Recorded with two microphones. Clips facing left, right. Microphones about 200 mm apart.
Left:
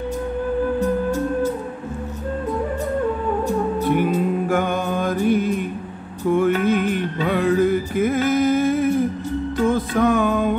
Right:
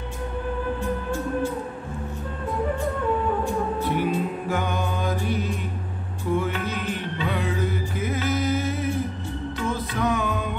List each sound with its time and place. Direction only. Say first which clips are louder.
0.7 s music: left 7 dB; 40° left (ahead or behind)
3.4 s music: left 5 dB; 45° left (ahead or behind)